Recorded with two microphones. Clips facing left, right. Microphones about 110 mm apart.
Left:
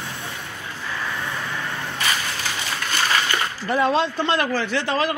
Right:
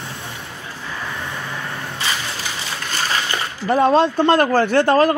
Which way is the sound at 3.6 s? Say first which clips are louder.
Right 6 dB; 45° right (ahead or behind).